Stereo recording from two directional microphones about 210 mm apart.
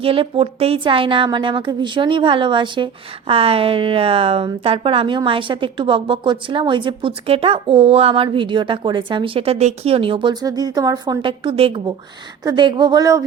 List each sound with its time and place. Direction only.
0.0 s a woman's voice: 25° right (ahead or behind)